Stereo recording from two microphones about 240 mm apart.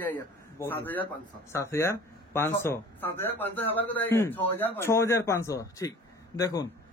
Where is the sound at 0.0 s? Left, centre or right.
Centre.